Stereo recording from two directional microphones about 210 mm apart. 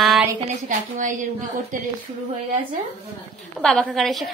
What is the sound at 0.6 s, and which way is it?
Speech, 35° right (ahead or behind).